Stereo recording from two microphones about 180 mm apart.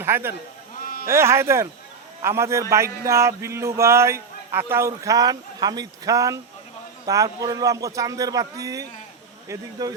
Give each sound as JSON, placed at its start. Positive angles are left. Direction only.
{"t": 0.0, "sound": "a man's voice", "side_deg": -10}